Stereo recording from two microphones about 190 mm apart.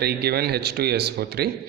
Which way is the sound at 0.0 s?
55° right (ahead or behind).